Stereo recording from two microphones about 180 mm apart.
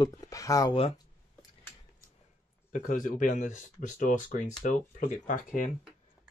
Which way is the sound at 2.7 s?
45° left (ahead or behind).